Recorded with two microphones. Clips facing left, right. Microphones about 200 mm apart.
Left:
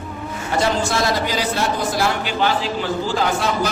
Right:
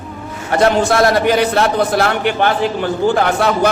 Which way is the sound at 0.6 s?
60° right (ahead or behind).